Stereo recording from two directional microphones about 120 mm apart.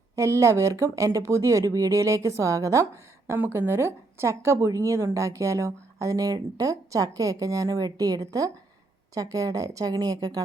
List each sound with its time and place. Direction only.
0.2 s speech: 25° right (ahead or behind)